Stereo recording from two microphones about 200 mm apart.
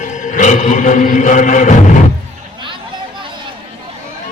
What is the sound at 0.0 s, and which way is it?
Chant, 40° left (ahead or behind).